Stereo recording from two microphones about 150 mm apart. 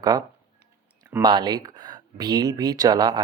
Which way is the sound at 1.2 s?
25° right (ahead or behind).